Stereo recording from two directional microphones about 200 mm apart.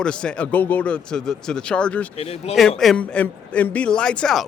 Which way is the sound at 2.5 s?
Centre (ahead or behind).